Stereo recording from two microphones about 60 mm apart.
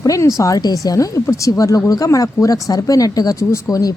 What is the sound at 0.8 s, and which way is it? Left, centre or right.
Speech, left.